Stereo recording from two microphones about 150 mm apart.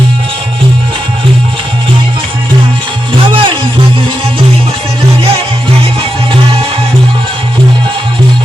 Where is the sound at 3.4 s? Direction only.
35° right (ahead or behind).